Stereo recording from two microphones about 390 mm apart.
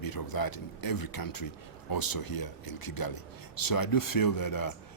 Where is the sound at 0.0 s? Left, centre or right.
Left.